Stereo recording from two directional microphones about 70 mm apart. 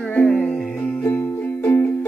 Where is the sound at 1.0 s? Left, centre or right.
Left.